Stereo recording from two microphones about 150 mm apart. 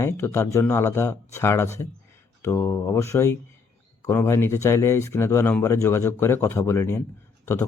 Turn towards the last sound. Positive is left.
turn(degrees=15)  # may be behind; listen again after turning